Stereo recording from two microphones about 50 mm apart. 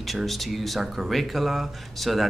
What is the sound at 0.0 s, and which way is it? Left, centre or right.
Speech, centre.